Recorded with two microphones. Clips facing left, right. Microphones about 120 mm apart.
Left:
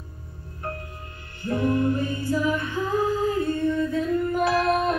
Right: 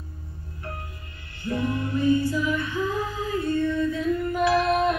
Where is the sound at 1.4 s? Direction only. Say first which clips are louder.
Left 4 dB; 45° left (ahead or behind).